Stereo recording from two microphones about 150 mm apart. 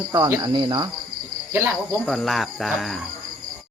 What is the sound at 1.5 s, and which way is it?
Speech, 15° right (ahead or behind).